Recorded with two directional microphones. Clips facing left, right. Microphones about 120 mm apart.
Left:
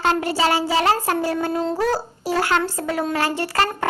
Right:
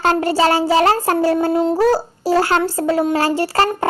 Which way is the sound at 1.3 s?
25° right (ahead or behind).